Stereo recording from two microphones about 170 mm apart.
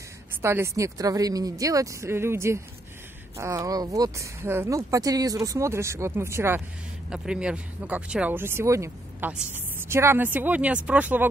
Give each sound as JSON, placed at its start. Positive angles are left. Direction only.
{"t": 0.4, "sound": "speech", "side_deg": -15}